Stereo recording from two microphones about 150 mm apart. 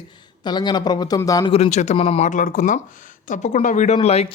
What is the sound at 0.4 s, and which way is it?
Speech, 30° left (ahead or behind).